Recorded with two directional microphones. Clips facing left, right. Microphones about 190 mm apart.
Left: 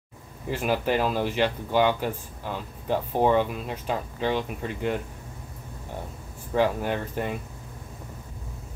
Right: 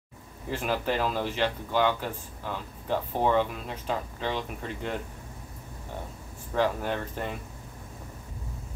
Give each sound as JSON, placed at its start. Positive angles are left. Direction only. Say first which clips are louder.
{"t": 0.5, "sound": "speech", "louder": "left 4 dB", "side_deg": 10}
{"t": 6.5, "sound": "speech", "louder": "left 3 dB", "side_deg": 10}